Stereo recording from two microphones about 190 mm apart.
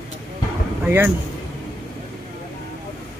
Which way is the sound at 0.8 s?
10° right (ahead or behind).